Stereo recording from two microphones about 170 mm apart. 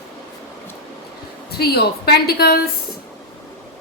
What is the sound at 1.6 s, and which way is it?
A woman's voice, 65° left (ahead or behind).